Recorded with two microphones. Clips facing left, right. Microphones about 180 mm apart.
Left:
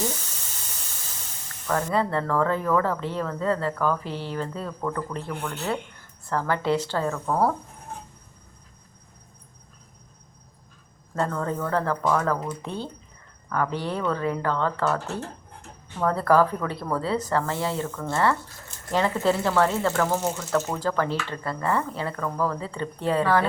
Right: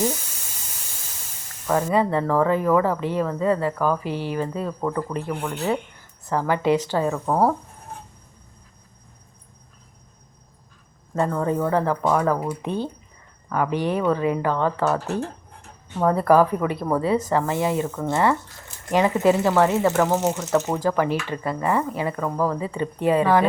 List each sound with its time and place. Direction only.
1.7 s speech: 15° right (ahead or behind)
11.1 s speech: 15° right (ahead or behind)